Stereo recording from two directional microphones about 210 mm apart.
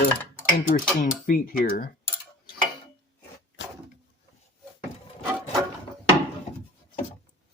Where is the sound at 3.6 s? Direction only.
60° left (ahead or behind).